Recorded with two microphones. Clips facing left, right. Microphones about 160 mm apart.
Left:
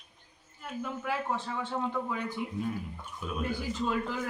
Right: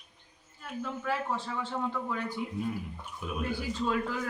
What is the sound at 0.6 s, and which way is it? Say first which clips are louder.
Speech: even; 15° left (ahead or behind).